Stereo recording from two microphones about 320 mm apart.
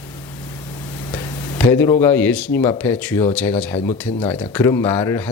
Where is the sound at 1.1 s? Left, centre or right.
Centre.